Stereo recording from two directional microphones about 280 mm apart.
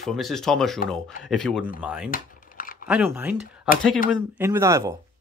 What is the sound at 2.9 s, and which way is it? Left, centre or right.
Speech, centre.